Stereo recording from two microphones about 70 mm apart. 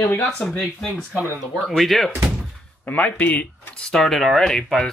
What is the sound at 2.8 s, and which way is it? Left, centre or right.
Speech, left.